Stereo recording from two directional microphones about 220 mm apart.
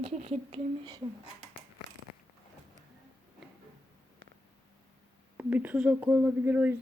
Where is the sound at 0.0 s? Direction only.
30° right (ahead or behind).